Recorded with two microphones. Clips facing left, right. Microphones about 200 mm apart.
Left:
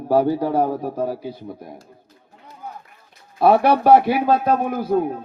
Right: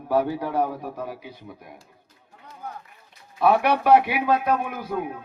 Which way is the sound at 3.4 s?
35° left (ahead or behind).